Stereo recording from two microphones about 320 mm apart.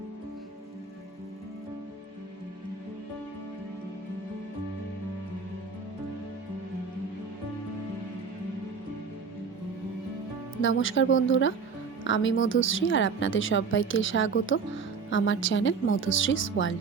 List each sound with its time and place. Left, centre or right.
10.6 s a woman's voice: left